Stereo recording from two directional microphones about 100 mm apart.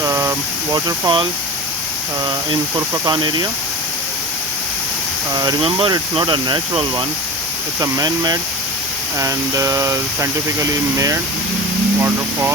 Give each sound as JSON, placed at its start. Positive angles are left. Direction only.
{"t": 0.0, "sound": "a sound", "side_deg": -30}
{"t": 0.7, "sound": "speech", "side_deg": -50}
{"t": 3.1, "sound": "speech", "side_deg": -50}
{"t": 5.3, "sound": "speech", "side_deg": -40}
{"t": 7.8, "sound": "speech", "side_deg": -40}